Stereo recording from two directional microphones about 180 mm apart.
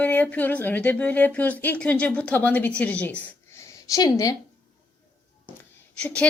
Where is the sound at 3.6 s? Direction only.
20° left (ahead or behind).